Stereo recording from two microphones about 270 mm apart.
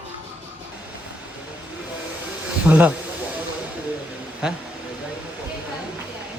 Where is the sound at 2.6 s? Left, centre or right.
Centre.